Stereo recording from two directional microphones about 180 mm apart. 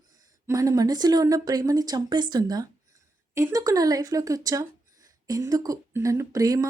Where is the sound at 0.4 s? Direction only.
15° right (ahead or behind).